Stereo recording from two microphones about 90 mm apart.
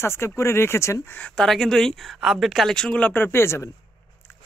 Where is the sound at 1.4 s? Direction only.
5° left (ahead or behind); by 3.6 s 30° left (ahead or behind).